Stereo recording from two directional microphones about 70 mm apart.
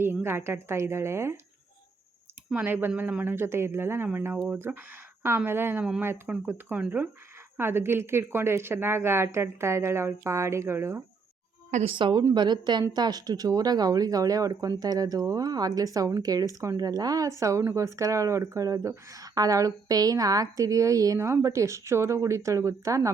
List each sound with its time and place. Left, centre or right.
0.0 s a woman's voice: right
2.6 s a woman's voice: right
12.3 s a woman's voice: right
12.9 s speech: right